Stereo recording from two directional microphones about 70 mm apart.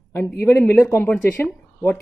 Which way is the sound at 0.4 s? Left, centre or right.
Left.